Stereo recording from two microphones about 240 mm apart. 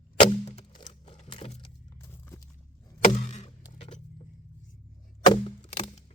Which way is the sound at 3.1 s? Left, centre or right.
Left.